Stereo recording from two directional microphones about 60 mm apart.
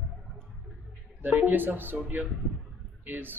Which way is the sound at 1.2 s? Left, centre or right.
Right.